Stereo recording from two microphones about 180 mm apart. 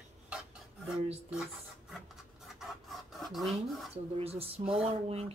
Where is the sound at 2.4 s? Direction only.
Centre (ahead or behind).